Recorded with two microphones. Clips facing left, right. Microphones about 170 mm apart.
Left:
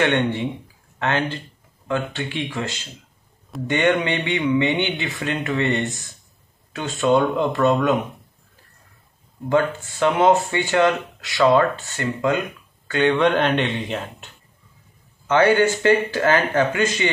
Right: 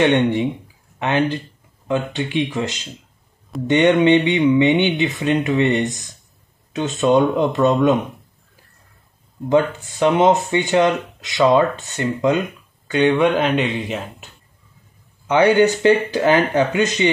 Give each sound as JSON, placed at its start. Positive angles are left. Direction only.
{"t": 0.0, "sound": "speech", "side_deg": -15}
{"t": 9.5, "sound": "speech", "side_deg": -15}
{"t": 15.2, "sound": "speech", "side_deg": -15}